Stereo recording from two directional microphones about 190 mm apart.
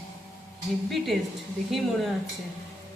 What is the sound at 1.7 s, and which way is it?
Speech, centre (ahead or behind).